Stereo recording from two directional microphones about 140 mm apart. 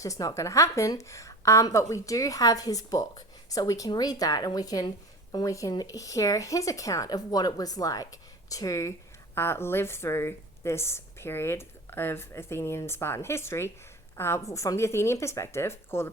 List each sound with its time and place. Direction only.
0.0 s a woman's voice: 25° left (ahead or behind)